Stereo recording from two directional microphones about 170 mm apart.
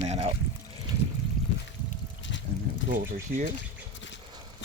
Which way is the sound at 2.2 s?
90° left.